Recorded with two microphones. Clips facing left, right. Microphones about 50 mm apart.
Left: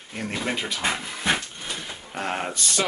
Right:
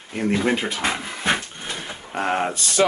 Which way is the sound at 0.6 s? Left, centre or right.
Right.